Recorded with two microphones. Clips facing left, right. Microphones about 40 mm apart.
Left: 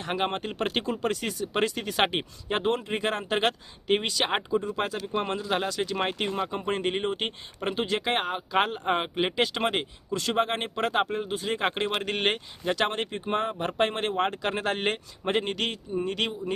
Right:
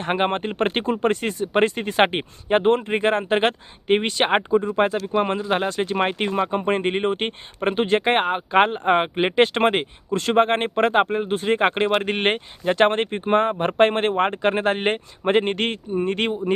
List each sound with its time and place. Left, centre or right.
0.0 s speech: right